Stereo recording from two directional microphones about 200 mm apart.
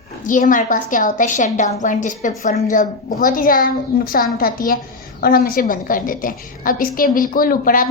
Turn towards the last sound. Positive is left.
turn(degrees=45)  # may be behind; listen again after turning